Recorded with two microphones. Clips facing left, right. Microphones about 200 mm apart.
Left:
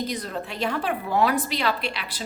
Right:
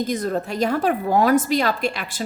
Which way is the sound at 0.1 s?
45° right (ahead or behind).